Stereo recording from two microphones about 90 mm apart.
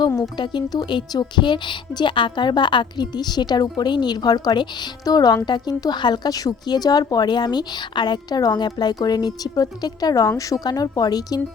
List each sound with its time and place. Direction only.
0.2 s speech: 60° left (ahead or behind)